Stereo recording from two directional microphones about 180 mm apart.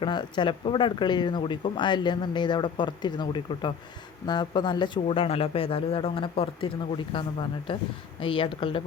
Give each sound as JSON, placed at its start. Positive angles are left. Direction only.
{"t": 0.0, "sound": "speech", "side_deg": 25}